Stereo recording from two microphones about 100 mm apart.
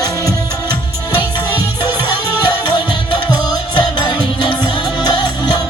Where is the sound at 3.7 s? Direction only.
45° left (ahead or behind).